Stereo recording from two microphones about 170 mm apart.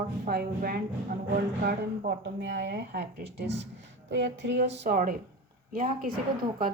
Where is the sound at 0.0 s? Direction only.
60° right (ahead or behind); by 4.9 s 85° right.